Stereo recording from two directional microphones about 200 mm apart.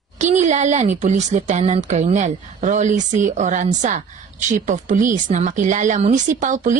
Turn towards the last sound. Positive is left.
turn(degrees=-40)  # may be behind; listen again after turning